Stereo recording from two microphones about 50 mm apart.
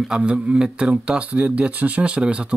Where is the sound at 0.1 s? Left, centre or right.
Right.